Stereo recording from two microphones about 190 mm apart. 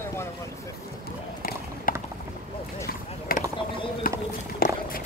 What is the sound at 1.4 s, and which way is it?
Run, 50° left (ahead or behind).